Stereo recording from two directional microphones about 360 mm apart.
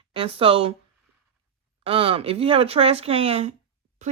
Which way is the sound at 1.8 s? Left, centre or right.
Centre.